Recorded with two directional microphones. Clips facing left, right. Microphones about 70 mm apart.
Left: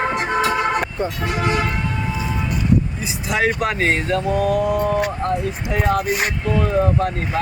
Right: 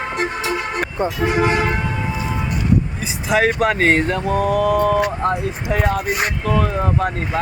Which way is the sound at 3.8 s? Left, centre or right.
Right.